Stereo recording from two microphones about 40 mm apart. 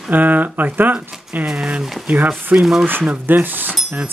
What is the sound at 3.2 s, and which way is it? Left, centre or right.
Speech, right.